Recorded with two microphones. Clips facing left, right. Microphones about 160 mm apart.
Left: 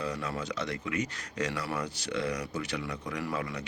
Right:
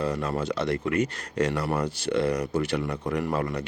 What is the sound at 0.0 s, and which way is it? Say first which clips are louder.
Speech: right 7 dB; 55° right (ahead or behind).